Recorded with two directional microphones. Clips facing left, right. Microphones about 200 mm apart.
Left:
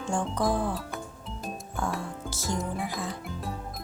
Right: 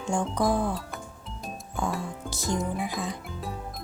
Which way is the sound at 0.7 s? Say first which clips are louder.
Even; centre (ahead or behind).